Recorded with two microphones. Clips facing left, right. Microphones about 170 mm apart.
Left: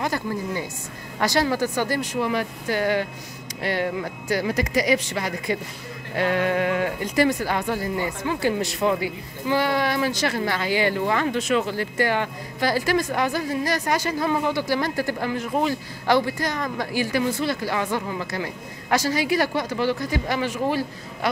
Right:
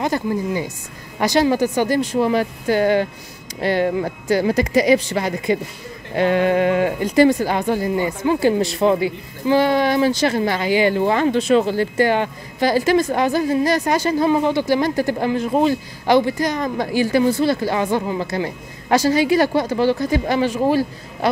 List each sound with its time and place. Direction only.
0.0 s speech: 20° right (ahead or behind)
2.0 s speech: 30° right (ahead or behind)
16.1 s speech: 20° right (ahead or behind)